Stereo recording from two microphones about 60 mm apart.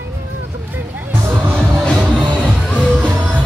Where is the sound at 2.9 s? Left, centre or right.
Right.